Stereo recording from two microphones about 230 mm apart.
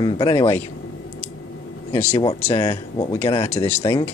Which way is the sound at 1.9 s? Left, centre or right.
Centre.